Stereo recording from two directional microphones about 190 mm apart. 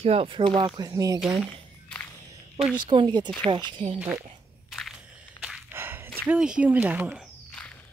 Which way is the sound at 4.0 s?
5° right (ahead or behind).